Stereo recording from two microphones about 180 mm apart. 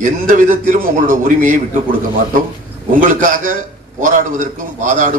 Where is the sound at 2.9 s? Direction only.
45° right (ahead or behind).